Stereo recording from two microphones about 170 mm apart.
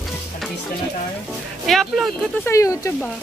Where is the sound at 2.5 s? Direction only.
15° left (ahead or behind).